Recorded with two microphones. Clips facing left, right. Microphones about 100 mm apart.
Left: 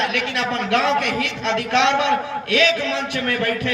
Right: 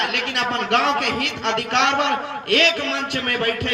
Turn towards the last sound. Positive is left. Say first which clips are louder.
# left 1 dB
turn(degrees=-60)  # may be behind; listen again after turning